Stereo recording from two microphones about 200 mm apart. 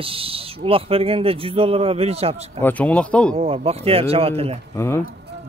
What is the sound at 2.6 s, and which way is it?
Speech, 5° left (ahead or behind).